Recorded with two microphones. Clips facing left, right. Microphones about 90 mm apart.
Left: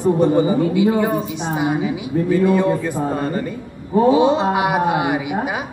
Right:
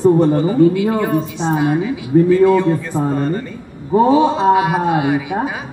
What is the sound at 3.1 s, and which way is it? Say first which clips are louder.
Speech: right 3 dB; 5° left (ahead or behind).